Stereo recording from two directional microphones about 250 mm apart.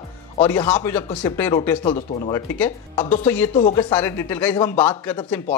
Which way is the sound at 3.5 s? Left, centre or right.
Centre.